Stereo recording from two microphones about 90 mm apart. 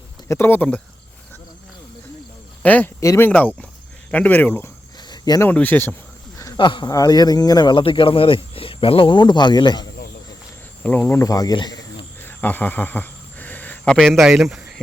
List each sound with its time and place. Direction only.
0.3 s speech: 25° left (ahead or behind)
2.6 s speech: 20° left (ahead or behind)
4.9 s cricket: 50° left (ahead or behind)
5.5 s speech: 20° left (ahead or behind)
6.6 s speech: 60° left (ahead or behind)
6.9 s speech: 45° left (ahead or behind)
10.8 s speech: 20° left (ahead or behind)
11.2 s speech: 40° left (ahead or behind)
11.5 s speech: 55° left (ahead or behind)
12.2 s a sound: 20° left (ahead or behind)
13.8 s a man's voice: 5° left (ahead or behind)